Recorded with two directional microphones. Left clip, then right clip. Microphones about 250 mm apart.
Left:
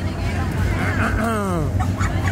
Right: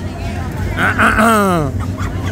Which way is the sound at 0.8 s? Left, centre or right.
Right.